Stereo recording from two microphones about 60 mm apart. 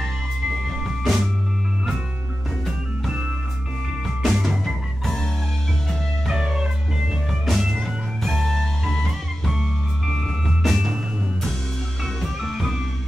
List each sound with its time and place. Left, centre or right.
0.5 s music: centre
3.1 s music: centre
4.2 s music: centre
6.3 s music: centre
9.6 s music: centre
12.2 s music: centre